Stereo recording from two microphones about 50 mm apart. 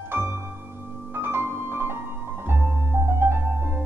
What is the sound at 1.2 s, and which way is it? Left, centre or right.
Music, right.